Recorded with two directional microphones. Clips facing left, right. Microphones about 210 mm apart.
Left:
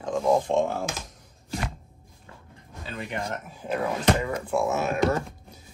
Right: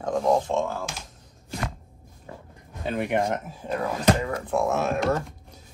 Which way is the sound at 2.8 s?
65° right (ahead or behind).